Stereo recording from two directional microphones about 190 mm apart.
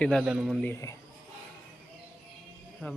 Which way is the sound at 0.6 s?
15° left (ahead or behind).